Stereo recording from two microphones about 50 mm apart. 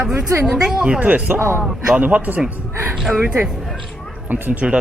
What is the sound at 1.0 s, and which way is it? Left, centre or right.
Speech, right.